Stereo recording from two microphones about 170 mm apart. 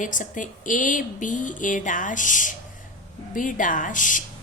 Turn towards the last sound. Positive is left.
turn(degrees=50)  # may be behind; listen again after turning